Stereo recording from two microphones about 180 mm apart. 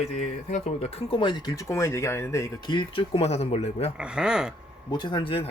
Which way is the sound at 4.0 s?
5° right (ahead or behind).